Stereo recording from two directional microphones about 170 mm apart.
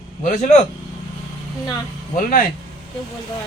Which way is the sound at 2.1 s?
55° left (ahead or behind).